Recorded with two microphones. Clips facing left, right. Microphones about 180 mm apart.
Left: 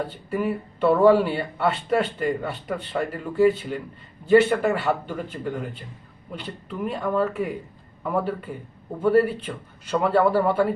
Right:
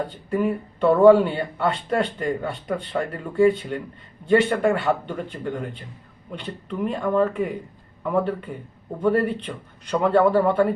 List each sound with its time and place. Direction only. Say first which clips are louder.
0.3 s a man's voice: right 3 dB; 5° left (ahead or behind)